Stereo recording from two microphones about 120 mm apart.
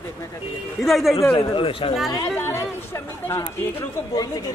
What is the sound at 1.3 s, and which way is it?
Speech, 45° left (ahead or behind).